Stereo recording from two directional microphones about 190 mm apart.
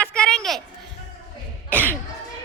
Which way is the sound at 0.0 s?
5° left (ahead or behind).